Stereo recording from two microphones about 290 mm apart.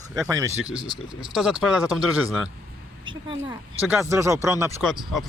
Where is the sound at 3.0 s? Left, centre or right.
Centre.